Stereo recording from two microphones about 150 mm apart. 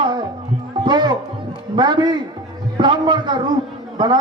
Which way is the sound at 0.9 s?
30° right (ahead or behind).